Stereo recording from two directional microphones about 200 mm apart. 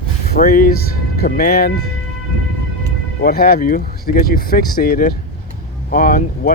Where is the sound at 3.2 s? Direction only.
50° left (ahead or behind).